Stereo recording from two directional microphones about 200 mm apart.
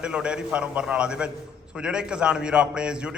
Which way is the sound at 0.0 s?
5° right (ahead or behind).